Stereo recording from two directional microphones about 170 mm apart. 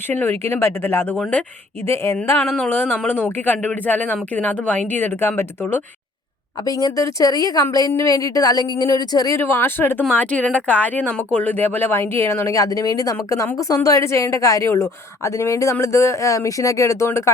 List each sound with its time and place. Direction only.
0.1 s a woman's voice: 10° left (ahead or behind)